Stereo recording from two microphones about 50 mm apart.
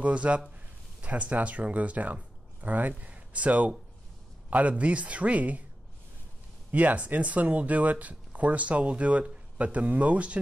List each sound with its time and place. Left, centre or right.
0.0 s speech: right
6.7 s speech: right